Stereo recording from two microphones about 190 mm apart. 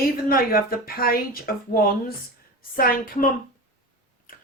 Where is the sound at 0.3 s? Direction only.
50° left (ahead or behind).